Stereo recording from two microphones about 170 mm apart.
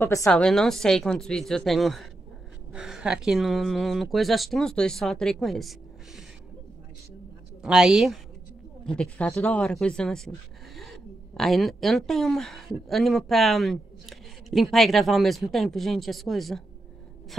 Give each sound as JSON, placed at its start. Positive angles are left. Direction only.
{"t": 0.0, "sound": "a woman's voice", "side_deg": 15}
{"t": 0.3, "sound": "speech", "side_deg": 5}
{"t": 7.6, "sound": "a woman's voice", "side_deg": -5}